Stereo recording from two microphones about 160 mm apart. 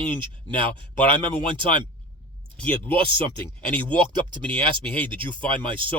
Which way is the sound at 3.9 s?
30° right (ahead or behind).